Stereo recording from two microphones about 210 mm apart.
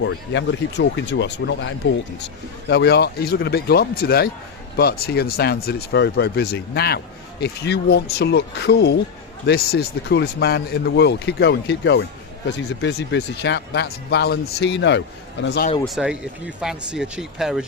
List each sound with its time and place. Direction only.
0.0 s speech: 60° left (ahead or behind)
15.8 s speech: centre (ahead or behind)